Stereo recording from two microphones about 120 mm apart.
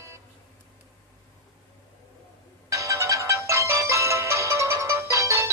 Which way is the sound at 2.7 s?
25° right (ahead or behind).